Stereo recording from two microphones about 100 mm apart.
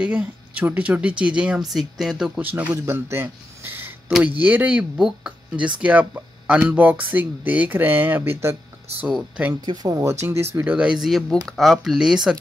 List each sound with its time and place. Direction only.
0.0 s speech: 10° right (ahead or behind)
2.4 s speech: 15° right (ahead or behind)
9.8 s speech: 25° right (ahead or behind)
10.9 s speech: centre (ahead or behind)